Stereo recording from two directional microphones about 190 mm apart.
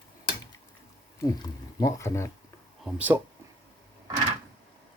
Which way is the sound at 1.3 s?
20° left (ahead or behind).